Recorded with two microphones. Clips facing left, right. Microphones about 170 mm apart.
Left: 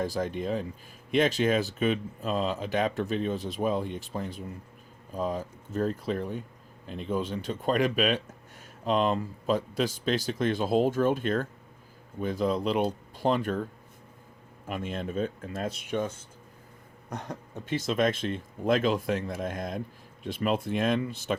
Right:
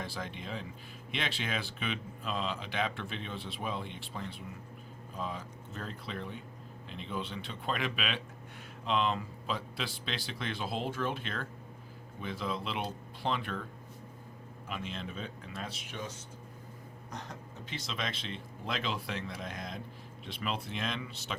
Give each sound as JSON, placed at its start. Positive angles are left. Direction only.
{"t": 0.0, "sound": "speech", "side_deg": 45}
{"t": 14.7, "sound": "speech", "side_deg": 50}